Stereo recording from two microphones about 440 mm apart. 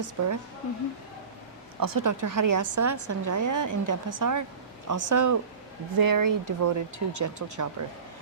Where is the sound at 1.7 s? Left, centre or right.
Right.